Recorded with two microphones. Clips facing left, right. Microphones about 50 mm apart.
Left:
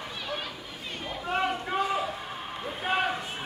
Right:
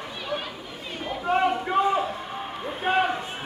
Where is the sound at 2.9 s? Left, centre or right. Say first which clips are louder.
Right 5 dB; right.